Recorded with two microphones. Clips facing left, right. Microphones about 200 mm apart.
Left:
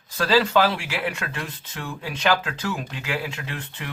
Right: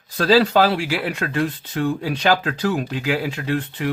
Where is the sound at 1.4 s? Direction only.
35° right (ahead or behind); by 3.5 s 55° right (ahead or behind).